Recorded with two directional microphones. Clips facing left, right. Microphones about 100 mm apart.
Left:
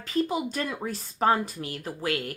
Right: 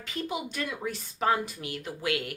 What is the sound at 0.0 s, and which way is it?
Speech, 35° left (ahead or behind).